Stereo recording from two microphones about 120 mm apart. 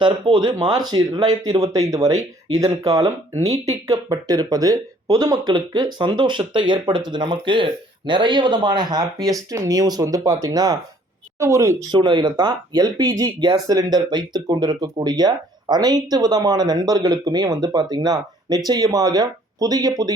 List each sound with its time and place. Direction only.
0.0 s speech: 40° right (ahead or behind)
11.9 s speech: 40° right (ahead or behind)